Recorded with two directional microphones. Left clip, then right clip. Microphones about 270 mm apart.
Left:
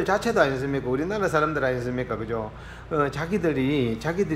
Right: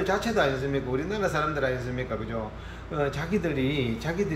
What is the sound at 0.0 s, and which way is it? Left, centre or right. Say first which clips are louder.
A man's voice: left 3 dB; centre.